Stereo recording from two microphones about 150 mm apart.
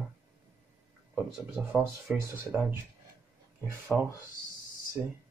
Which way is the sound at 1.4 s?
5° right (ahead or behind).